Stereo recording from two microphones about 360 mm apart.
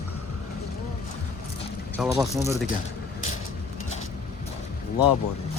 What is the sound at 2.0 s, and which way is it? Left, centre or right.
Speech, centre.